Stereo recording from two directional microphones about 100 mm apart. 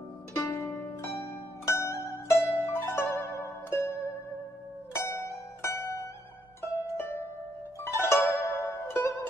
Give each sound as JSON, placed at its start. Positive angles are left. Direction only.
{"t": 0.4, "sound": "pizzicato", "side_deg": 25}
{"t": 2.6, "sound": "zither", "side_deg": 25}
{"t": 4.9, "sound": "music", "side_deg": 30}